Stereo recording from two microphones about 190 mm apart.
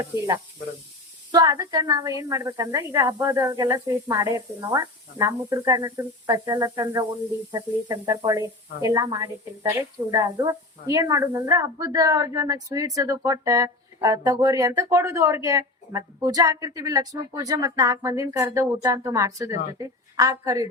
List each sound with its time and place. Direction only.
1.3 s speech: 20° right (ahead or behind)